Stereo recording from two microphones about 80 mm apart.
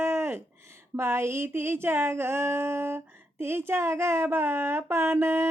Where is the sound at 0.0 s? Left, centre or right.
Right.